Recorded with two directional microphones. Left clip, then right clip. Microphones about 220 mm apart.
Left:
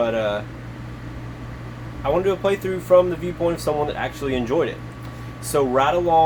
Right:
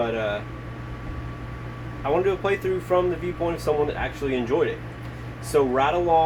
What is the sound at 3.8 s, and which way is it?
Speech, 35° left (ahead or behind).